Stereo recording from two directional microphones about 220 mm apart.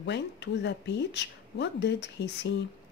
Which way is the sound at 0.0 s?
50° left (ahead or behind).